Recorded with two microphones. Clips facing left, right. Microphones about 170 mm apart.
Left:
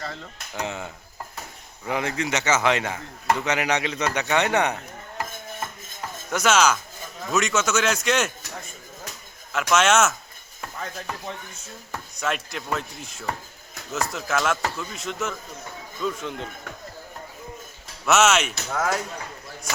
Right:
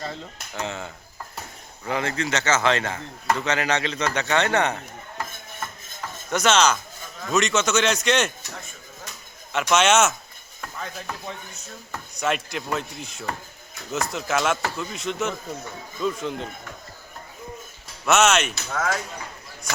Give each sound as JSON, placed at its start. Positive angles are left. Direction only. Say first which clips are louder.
{"t": 0.5, "sound": "speech", "louder": "even", "side_deg": 15}
{"t": 1.9, "sound": "speech", "louder": "even", "side_deg": 15}
{"t": 6.3, "sound": "speech", "louder": "even", "side_deg": 5}
{"t": 9.7, "sound": "speech", "louder": "right 1 dB", "side_deg": 0}
{"t": 12.1, "sound": "speech", "louder": "right 3 dB", "side_deg": 0}
{"t": 18.0, "sound": "speech", "louder": "even", "side_deg": 5}